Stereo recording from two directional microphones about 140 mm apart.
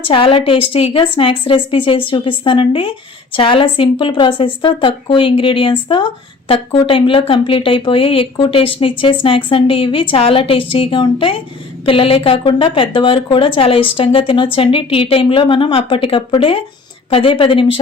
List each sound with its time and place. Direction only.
0.0 s a woman's voice: 40° left (ahead or behind)